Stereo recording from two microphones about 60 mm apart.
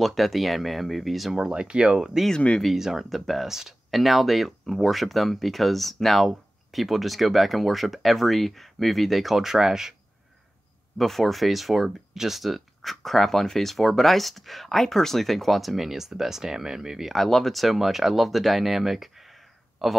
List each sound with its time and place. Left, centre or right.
0.0 s speech: centre
1.4 s speech: centre
2.6 s speech: centre
11.0 s speech: centre